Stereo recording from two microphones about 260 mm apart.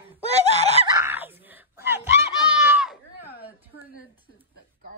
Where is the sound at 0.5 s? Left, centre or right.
Right.